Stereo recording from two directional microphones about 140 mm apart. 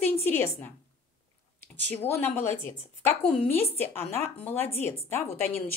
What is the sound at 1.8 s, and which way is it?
Speech, 15° left (ahead or behind).